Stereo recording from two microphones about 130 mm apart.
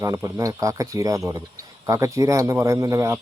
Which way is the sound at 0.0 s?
25° right (ahead or behind).